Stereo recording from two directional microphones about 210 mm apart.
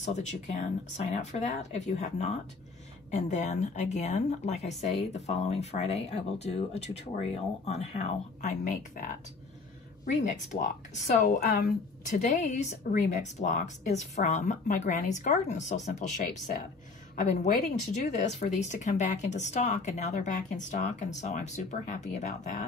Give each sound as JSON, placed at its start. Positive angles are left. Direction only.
{"t": 0.0, "sound": "speech", "side_deg": 35}
{"t": 10.0, "sound": "speech", "side_deg": 35}
{"t": 11.4, "sound": "speech", "side_deg": 50}
{"t": 12.2, "sound": "speech", "side_deg": 35}